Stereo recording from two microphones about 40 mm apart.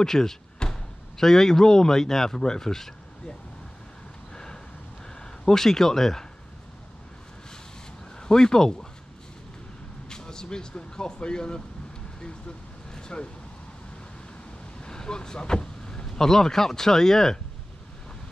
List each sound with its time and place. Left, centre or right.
0.0 s speech: centre
4.3 s a sound: centre
5.2 s speech: centre
8.2 s speech: centre
10.0 s speech: centre
12.2 s vehicle: left
14.8 s vehicle: centre
16.1 s speech: centre